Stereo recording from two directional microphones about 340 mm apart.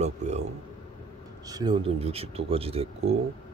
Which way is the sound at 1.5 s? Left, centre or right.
Centre.